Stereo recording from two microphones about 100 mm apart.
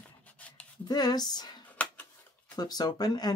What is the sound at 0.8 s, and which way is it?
Speech, 40° left (ahead or behind).